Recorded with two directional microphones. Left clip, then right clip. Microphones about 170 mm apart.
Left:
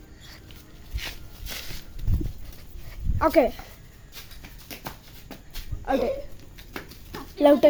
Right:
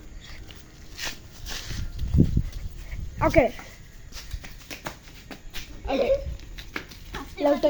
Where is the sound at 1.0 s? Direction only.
35° right (ahead or behind).